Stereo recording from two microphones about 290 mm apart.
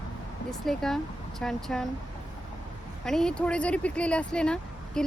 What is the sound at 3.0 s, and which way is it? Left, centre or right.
Speech, centre.